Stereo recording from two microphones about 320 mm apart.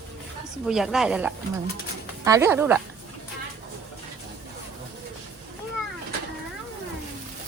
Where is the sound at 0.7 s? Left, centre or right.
Centre.